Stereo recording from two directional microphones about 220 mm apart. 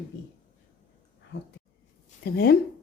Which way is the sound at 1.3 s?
50° left (ahead or behind).